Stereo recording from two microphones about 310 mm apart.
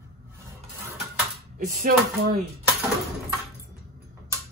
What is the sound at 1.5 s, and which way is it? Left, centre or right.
Speech, right.